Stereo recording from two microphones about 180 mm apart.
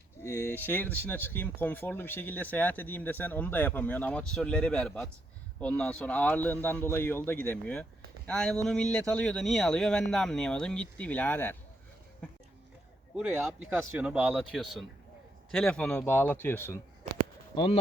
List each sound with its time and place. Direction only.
0.2 s speech: 15° left (ahead or behind)
13.1 s speech: 5° right (ahead or behind); by 16.8 s 10° left (ahead or behind)
17.5 s speech: 30° left (ahead or behind)